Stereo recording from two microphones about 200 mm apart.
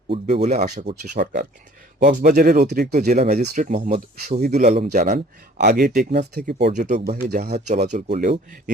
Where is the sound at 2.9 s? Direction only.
35° right (ahead or behind).